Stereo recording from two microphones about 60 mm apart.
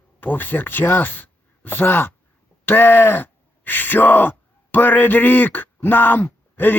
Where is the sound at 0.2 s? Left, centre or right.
Left.